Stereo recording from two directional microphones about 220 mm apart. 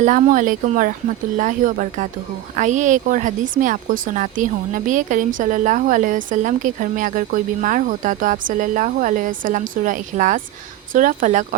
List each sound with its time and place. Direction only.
0.0 s speech: 35° right (ahead or behind)